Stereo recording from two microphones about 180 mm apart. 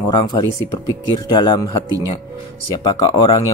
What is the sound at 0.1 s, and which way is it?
Speech, 25° left (ahead or behind).